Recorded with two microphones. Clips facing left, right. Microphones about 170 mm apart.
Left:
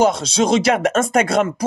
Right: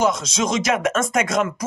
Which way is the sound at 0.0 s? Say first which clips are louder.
Left 4 dB; 30° left (ahead or behind).